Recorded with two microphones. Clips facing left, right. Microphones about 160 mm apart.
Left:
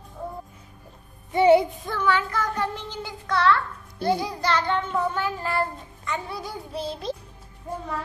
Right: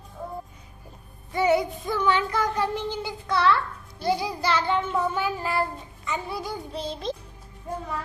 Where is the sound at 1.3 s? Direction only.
25° left (ahead or behind).